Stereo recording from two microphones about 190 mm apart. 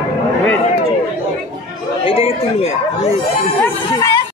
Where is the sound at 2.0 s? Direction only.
30° left (ahead or behind).